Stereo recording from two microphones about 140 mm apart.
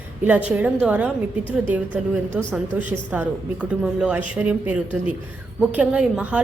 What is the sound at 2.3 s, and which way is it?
Speech, 10° right (ahead or behind).